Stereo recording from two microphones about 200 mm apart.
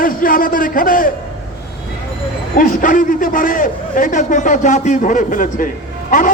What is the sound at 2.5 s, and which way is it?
A man's voice, 45° left (ahead or behind).